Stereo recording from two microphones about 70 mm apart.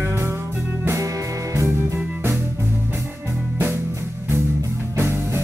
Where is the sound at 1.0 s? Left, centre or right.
Right.